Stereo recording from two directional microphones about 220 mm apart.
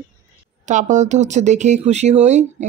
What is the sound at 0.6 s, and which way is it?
Speech, 35° right (ahead or behind).